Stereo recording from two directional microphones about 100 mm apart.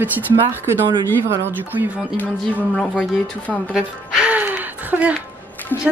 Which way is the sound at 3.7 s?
10° right (ahead or behind).